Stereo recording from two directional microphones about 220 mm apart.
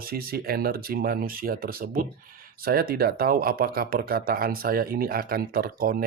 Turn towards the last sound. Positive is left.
turn(degrees=-40)  # may be behind; listen again after turning